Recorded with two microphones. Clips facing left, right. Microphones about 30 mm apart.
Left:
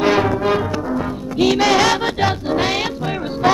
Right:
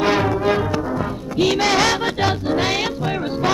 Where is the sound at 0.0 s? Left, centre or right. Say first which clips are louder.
Left 2 dB; centre.